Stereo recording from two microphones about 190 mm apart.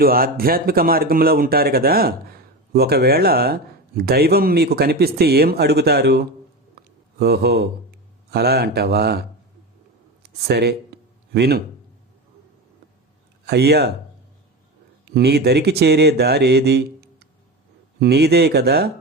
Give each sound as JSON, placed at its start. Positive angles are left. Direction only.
{"t": 0.0, "sound": "speech", "side_deg": -50}
{"t": 10.4, "sound": "speech", "side_deg": -60}
{"t": 13.4, "sound": "speech", "side_deg": -60}
{"t": 15.0, "sound": "speech", "side_deg": -55}